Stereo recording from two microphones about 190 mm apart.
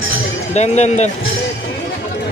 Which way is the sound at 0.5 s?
35° left (ahead or behind).